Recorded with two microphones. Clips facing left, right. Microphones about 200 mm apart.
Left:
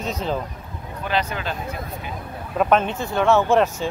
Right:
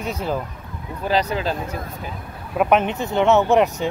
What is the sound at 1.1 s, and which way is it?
Speech, 35° right (ahead or behind).